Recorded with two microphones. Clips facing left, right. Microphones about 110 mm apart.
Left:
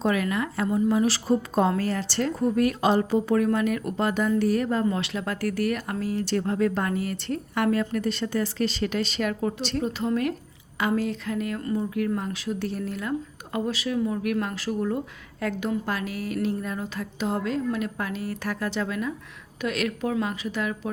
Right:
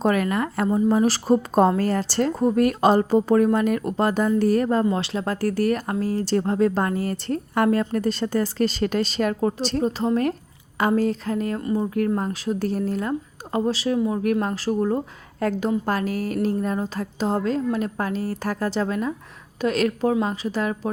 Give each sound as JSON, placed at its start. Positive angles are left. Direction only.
{"t": 0.0, "sound": "speech", "side_deg": -45}